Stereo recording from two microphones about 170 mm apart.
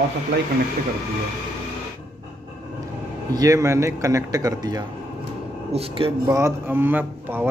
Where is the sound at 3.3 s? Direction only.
20° right (ahead or behind).